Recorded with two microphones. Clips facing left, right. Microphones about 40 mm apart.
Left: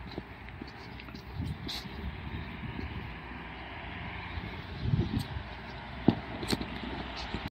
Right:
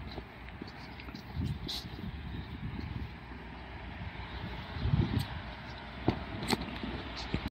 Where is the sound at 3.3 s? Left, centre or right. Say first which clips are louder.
Left 4 dB; left.